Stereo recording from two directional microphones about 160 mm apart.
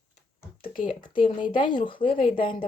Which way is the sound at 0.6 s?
60° left (ahead or behind).